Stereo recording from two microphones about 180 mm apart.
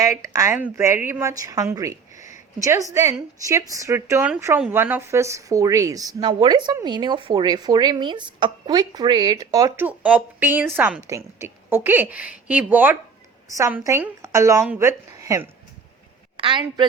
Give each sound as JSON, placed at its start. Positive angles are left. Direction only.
{"t": 0.0, "sound": "a woman's voice", "side_deg": -15}
{"t": 2.1, "sound": "a sound", "side_deg": 45}
{"t": 2.6, "sound": "a woman's voice", "side_deg": -15}
{"t": 16.4, "sound": "a woman's voice", "side_deg": -25}